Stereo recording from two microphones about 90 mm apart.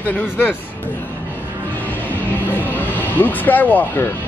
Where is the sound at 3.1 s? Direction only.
20° left (ahead or behind).